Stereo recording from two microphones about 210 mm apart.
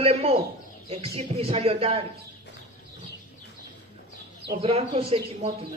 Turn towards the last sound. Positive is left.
turn(degrees=-30)  # may be behind; listen again after turning